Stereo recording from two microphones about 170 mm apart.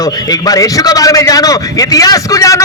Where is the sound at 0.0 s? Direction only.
20° left (ahead or behind).